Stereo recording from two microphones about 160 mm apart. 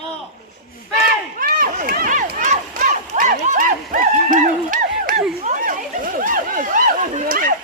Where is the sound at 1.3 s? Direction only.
60° right (ahead or behind).